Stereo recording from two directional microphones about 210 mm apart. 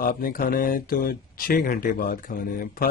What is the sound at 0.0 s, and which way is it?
Speech, 45° left (ahead or behind).